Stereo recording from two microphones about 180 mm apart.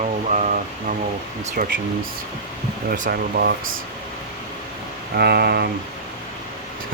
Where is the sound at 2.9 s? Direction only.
50° right (ahead or behind).